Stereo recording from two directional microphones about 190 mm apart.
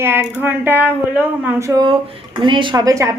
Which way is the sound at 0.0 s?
10° right (ahead or behind).